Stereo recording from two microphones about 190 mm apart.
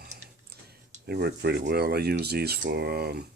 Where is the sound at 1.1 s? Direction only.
55° right (ahead or behind).